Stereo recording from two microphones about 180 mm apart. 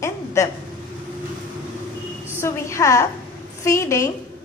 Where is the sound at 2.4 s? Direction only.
15° left (ahead or behind).